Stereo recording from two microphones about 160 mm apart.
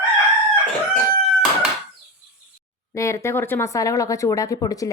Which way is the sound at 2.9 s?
20° left (ahead or behind).